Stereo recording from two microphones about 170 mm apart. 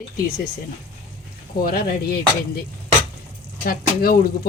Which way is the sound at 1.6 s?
65° left (ahead or behind).